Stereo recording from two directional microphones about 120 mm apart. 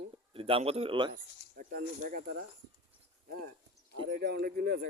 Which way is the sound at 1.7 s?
90° right.